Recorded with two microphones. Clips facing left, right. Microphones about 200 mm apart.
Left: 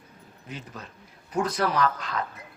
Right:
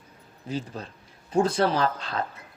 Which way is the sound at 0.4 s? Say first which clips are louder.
Right 8 dB; 30° right (ahead or behind).